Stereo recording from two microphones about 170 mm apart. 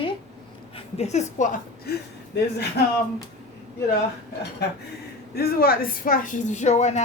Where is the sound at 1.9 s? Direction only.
65° left (ahead or behind).